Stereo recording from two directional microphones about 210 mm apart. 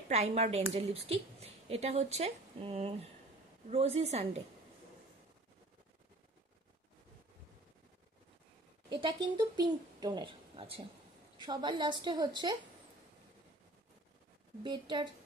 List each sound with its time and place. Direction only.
0.1 s speech: 30° right (ahead or behind)
9.0 s speech: 20° right (ahead or behind)
14.6 s speech: 20° right (ahead or behind)